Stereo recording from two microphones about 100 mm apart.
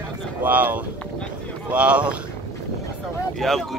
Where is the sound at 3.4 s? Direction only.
Centre (ahead or behind).